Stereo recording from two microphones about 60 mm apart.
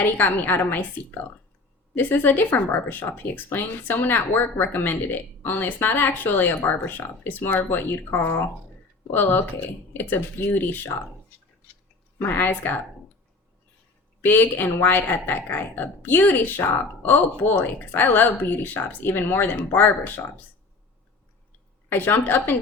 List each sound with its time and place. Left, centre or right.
0.0 s speech: left
2.0 s speech: left
12.2 s speech: left
14.2 s speech: left
21.8 s speech: left